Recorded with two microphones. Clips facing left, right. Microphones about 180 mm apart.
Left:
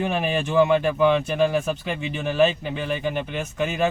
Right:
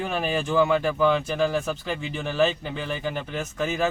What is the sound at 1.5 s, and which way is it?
Speech, 15° left (ahead or behind).